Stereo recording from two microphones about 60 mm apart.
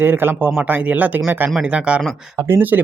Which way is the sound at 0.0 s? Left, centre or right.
Right.